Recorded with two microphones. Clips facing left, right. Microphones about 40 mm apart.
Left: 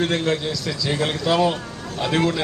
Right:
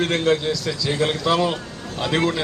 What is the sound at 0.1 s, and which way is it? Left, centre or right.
Speech, right.